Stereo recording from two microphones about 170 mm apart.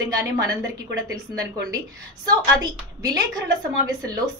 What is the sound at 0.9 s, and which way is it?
Speech, 20° right (ahead or behind).